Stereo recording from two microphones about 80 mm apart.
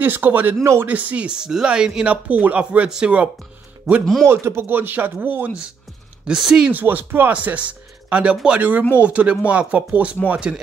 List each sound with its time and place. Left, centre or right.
0.0 s speech: right
4.0 s speech: centre
4.3 s speech: right
6.2 s speech: centre
6.7 s speech: right